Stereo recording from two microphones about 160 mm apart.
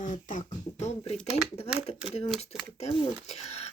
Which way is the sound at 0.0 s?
55° left (ahead or behind).